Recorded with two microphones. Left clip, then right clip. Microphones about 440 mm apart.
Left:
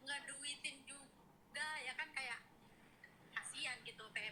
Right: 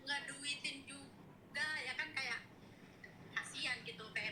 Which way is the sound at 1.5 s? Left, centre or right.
Left.